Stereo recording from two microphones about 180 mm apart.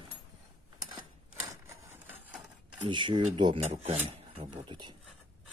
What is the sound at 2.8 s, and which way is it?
Speech, 25° right (ahead or behind).